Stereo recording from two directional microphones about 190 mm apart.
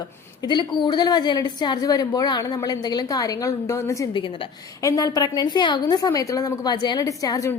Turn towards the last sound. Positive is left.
turn(degrees=20)  # may be behind; listen again after turning